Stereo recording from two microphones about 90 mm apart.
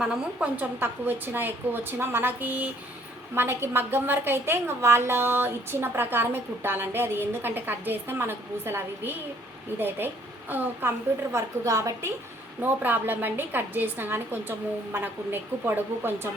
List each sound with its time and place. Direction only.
0.0 s a woman's voice: 10° right (ahead or behind); by 12.1 s 35° right (ahead or behind)
12.6 s a woman's voice: 20° right (ahead or behind)